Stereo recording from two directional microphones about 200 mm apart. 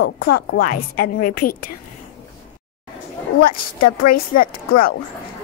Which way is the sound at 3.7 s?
45° left (ahead or behind).